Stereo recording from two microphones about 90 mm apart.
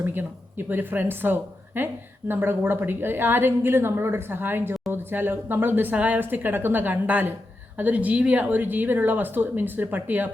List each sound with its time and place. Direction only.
0.0 s speech: 20° right (ahead or behind)